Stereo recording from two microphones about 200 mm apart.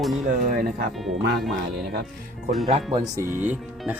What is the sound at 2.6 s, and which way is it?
Speech, 25° right (ahead or behind).